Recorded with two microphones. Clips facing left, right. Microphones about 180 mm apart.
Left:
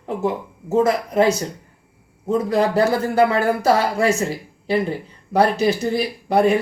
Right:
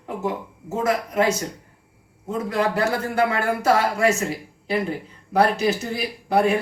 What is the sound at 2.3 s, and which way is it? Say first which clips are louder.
A man's voice: left 5 dB; 35° left (ahead or behind).